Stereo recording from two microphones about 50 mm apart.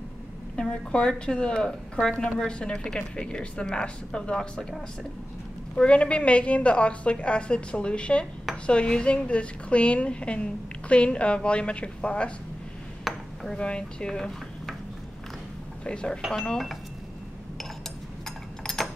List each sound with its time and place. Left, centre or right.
0.6 s a woman's voice: centre
5.8 s a woman's voice: left
13.0 s dishes: centre
13.6 s speech: centre
15.8 s a woman's voice: centre
18.2 s a sound: centre